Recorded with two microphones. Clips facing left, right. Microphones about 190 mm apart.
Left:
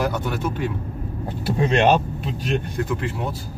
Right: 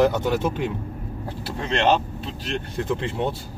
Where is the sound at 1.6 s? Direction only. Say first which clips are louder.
Left 3 dB; 15° left (ahead or behind).